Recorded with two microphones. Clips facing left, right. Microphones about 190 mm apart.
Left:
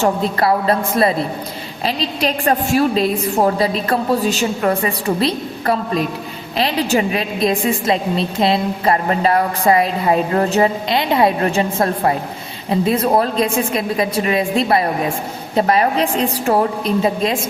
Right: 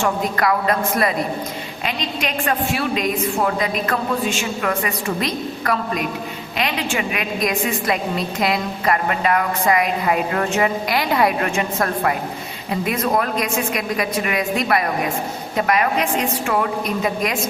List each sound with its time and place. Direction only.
0.0 s a woman's voice: 30° left (ahead or behind)